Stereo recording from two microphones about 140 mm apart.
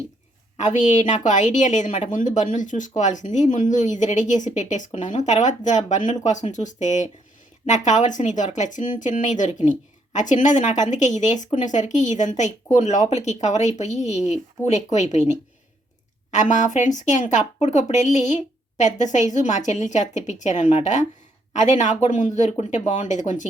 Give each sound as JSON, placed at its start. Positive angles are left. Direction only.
{"t": 0.8, "sound": "speech", "side_deg": 60}
{"t": 16.3, "sound": "speech", "side_deg": 60}